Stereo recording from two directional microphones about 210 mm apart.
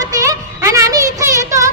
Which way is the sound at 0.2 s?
15° right (ahead or behind).